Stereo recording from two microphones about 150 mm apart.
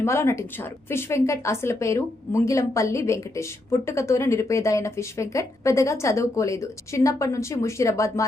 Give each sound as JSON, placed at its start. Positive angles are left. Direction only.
{"t": 0.0, "sound": "a woman's voice", "side_deg": 20}